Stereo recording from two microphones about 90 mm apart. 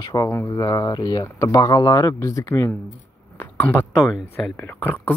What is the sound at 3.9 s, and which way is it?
Speech, centre (ahead or behind).